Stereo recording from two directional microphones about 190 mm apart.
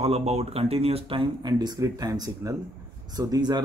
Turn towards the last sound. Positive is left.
turn(degrees=-20)  # may be behind; listen again after turning